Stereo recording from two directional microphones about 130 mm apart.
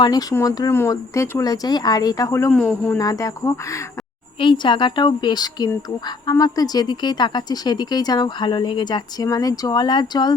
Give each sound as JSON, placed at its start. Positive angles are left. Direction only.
{"t": 0.0, "sound": "speech", "side_deg": 30}
{"t": 2.5, "sound": "speech", "side_deg": 10}
{"t": 3.0, "sound": "speech", "side_deg": 25}
{"t": 4.4, "sound": "speech", "side_deg": 40}